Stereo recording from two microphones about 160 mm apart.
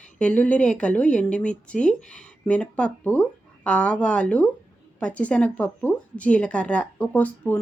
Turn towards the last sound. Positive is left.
turn(degrees=10)  # may be behind; listen again after turning